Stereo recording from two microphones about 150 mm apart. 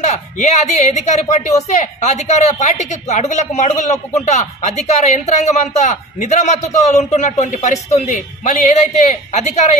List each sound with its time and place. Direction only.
0.0 s speech: 50° left (ahead or behind)